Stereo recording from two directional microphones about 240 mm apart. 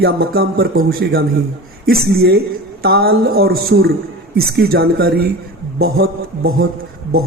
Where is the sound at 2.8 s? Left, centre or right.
Right.